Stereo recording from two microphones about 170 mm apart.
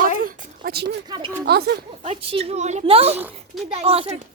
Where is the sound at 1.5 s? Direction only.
70° right (ahead or behind).